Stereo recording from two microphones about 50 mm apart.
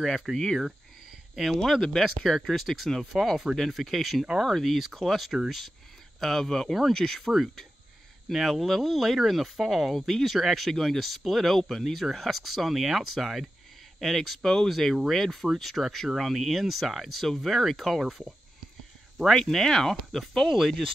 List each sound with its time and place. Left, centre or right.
0.0 s speech: centre
19.2 s speech: centre